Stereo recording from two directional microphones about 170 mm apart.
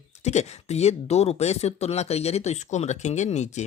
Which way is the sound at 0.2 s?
40° left (ahead or behind).